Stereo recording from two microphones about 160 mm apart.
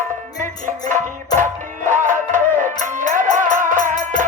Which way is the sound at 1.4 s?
55° right (ahead or behind).